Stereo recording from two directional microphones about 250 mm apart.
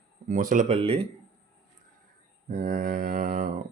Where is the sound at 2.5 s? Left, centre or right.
Right.